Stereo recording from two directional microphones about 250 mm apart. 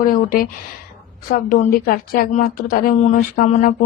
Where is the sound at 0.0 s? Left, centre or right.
Left.